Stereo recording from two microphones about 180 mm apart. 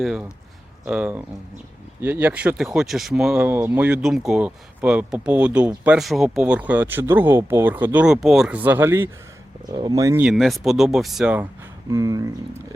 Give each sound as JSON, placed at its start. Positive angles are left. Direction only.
{"t": 0.0, "sound": "speech", "side_deg": -5}
{"t": 10.2, "sound": "speech", "side_deg": 0}
{"t": 11.9, "sound": "speech", "side_deg": -20}